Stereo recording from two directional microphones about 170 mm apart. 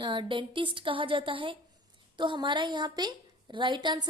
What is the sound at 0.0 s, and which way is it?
A woman's voice, 30° right (ahead or behind).